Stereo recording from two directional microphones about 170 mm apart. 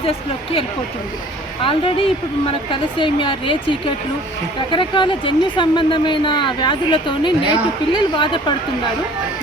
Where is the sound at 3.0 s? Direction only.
30° left (ahead or behind).